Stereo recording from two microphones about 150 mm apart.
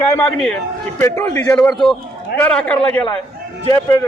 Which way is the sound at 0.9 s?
15° left (ahead or behind).